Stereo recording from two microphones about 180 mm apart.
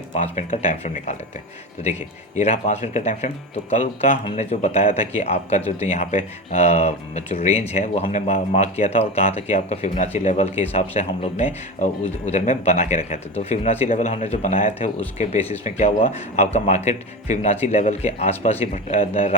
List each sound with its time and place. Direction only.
0.2 s speech: 40° left (ahead or behind)